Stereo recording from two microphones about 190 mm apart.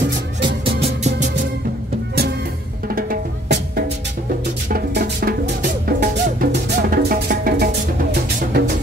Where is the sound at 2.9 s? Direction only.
50° right (ahead or behind).